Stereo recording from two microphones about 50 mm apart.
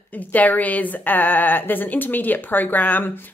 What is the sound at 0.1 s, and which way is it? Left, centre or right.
Speech, left.